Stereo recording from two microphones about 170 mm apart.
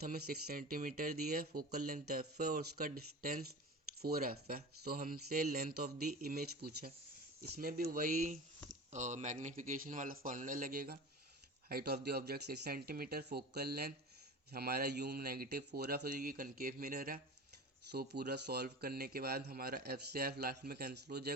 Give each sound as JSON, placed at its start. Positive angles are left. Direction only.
{"t": 0.0, "sound": "speech", "side_deg": -60}
{"t": 11.7, "sound": "speech", "side_deg": -70}
{"t": 17.9, "sound": "speech", "side_deg": -70}